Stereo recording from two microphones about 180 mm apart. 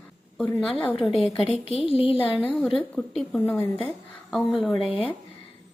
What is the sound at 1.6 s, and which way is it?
Speech, 30° left (ahead or behind).